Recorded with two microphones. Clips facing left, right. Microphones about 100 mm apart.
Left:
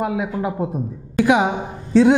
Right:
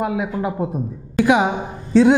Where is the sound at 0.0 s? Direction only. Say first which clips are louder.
Even; 20° right (ahead or behind).